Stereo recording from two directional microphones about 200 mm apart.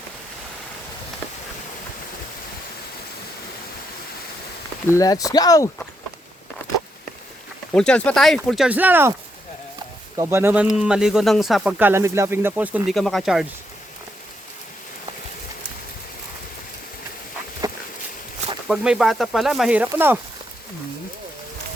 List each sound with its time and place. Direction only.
4.9 s speech: 15° left (ahead or behind)
7.7 s speech: 5° left (ahead or behind)
10.2 s speech: 10° right (ahead or behind)
17.6 s a sound: 20° right (ahead or behind)
18.7 s speech: 5° right (ahead or behind)